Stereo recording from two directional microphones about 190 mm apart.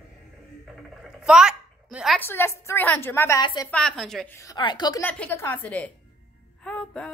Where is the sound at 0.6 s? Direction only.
Centre (ahead or behind).